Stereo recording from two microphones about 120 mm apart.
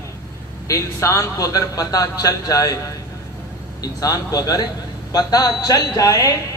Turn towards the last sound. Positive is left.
turn(degrees=30)  # may be behind; listen again after turning